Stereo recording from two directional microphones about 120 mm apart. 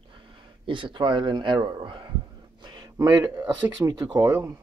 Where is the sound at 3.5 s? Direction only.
35° right (ahead or behind).